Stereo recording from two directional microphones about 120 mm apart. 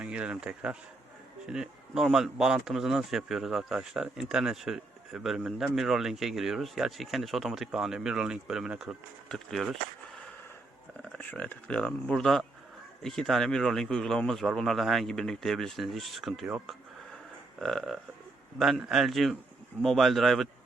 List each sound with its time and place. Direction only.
0.0 s speech: 10° right (ahead or behind)
11.2 s speech: 15° left (ahead or behind)
17.6 s speech: 5° left (ahead or behind)